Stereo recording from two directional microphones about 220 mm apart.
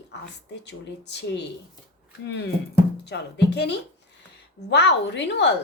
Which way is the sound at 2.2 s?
55° left (ahead or behind).